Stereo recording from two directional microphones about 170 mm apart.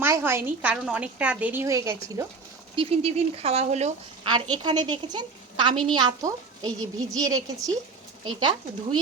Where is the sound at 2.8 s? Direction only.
35° right (ahead or behind).